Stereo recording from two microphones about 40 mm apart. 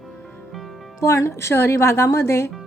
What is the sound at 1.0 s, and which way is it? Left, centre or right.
Speech, left.